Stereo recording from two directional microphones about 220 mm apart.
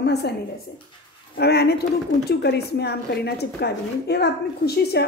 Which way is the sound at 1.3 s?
45° left (ahead or behind).